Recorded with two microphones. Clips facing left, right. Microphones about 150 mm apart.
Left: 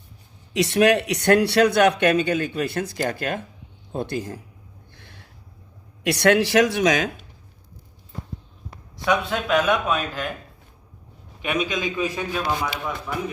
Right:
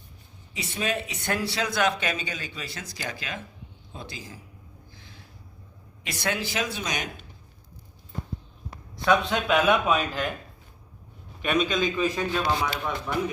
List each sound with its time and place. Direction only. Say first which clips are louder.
0.5 s a man's voice: left 12 dB; 80° left; by 4.4 s 60° left (ahead or behind)
4.9 s a sound: left 3 dB; 65° left (ahead or behind)
6.0 s speech: left 12 dB; 70° left (ahead or behind); by 7.0 s 90° left
9.3 s a man's voice: left 1 dB; centre (ahead or behind)
11.4 s a man's voice: even; 10° left (ahead or behind)